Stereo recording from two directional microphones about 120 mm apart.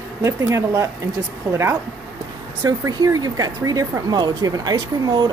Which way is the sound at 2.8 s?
30° right (ahead or behind).